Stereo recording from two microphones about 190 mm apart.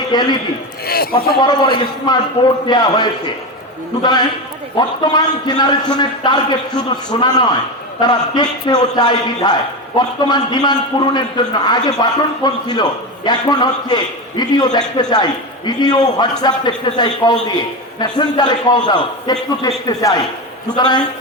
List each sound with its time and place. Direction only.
0.1 s a man's voice: 20° left (ahead or behind)
0.9 s a man's voice: 55° left (ahead or behind)
1.4 s a man's voice: 25° left (ahead or behind)